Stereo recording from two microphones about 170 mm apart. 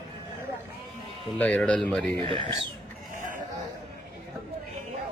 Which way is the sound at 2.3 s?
30° right (ahead or behind).